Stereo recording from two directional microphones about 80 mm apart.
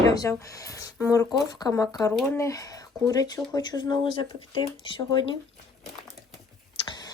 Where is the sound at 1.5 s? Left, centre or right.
Left.